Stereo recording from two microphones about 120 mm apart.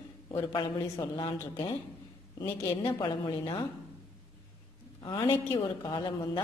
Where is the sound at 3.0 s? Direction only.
45° left (ahead or behind).